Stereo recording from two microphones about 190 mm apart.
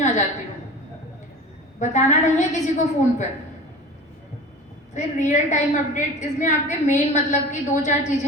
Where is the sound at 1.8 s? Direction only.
40° left (ahead or behind).